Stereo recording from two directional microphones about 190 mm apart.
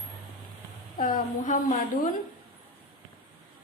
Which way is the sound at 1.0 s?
40° left (ahead or behind).